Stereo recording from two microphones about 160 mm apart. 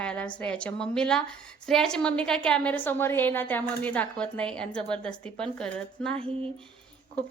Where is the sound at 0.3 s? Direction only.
5° left (ahead or behind).